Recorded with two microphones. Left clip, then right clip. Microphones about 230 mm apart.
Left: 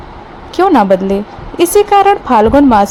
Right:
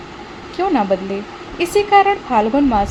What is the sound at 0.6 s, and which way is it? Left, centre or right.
A woman's voice, left.